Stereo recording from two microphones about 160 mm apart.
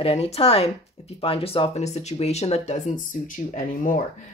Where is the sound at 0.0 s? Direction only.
35° left (ahead or behind).